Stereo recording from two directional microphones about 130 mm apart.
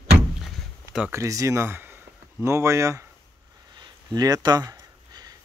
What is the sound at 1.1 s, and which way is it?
Speech, 25° right (ahead or behind).